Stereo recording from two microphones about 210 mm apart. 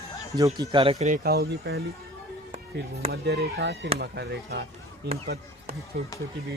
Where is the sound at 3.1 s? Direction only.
50° right (ahead or behind).